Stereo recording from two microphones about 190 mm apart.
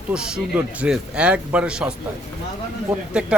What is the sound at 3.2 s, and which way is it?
Speech, 5° right (ahead or behind).